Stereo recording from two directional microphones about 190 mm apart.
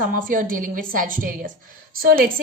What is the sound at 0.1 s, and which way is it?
A woman's voice, 45° right (ahead or behind).